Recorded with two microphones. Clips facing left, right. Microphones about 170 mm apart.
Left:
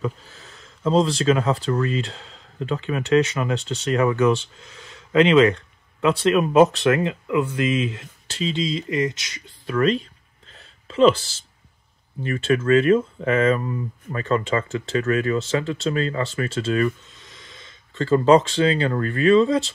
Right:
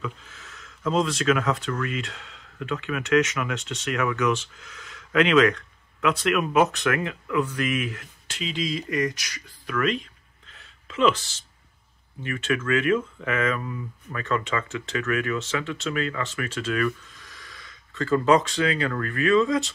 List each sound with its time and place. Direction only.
0.0 s speech: 35° left (ahead or behind)
10.5 s a sound: 35° left (ahead or behind)
12.2 s speech: 35° left (ahead or behind)